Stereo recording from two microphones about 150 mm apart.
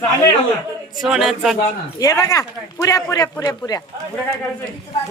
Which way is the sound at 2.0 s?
20° left (ahead or behind).